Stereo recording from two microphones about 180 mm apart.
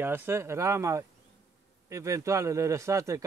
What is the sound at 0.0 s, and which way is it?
A man's voice, 10° right (ahead or behind).